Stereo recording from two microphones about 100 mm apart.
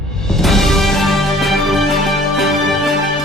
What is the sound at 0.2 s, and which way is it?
Music, 5° left (ahead or behind).